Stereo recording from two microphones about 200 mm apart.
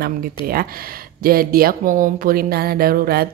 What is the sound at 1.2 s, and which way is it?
A woman's voice, 45° right (ahead or behind).